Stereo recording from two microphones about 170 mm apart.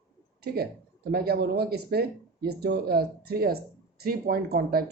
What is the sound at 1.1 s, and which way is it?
Speech, 65° right (ahead or behind).